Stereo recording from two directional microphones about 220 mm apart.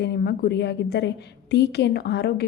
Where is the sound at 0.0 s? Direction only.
50° left (ahead or behind).